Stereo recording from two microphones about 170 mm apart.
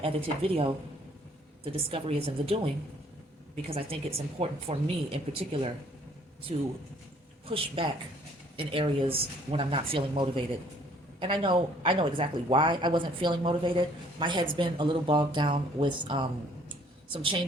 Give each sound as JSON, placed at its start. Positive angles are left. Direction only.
{"t": 0.0, "sound": "speech", "side_deg": -35}
{"t": 3.7, "sound": "speech", "side_deg": -35}
{"t": 7.4, "sound": "speech", "side_deg": -35}